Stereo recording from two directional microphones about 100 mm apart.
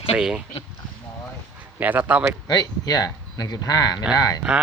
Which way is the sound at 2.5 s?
40° left (ahead or behind).